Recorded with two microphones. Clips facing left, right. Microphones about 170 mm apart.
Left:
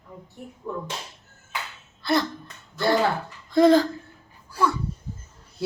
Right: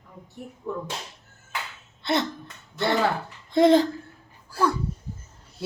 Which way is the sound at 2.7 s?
25° right (ahead or behind).